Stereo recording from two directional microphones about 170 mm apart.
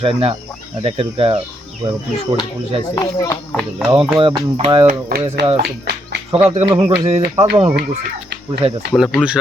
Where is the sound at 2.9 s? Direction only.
20° left (ahead or behind).